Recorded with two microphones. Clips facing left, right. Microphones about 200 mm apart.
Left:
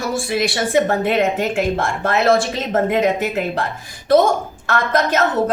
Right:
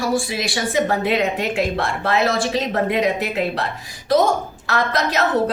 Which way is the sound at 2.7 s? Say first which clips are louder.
Left 6 dB; 45° left (ahead or behind).